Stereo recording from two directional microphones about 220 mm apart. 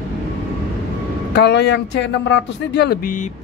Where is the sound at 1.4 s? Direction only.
50° left (ahead or behind).